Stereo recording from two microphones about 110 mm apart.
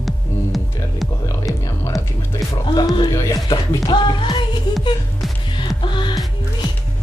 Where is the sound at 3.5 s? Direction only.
40° left (ahead or behind).